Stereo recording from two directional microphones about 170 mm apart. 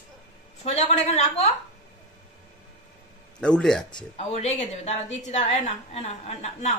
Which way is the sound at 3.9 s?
40° left (ahead or behind).